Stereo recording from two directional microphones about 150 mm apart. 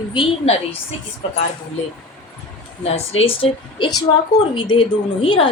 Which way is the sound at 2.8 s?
40° left (ahead or behind).